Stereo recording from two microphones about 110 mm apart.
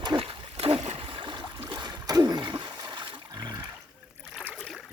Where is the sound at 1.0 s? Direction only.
50° right (ahead or behind).